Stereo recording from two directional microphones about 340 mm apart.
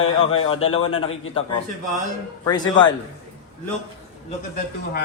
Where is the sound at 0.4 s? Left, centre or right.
Centre.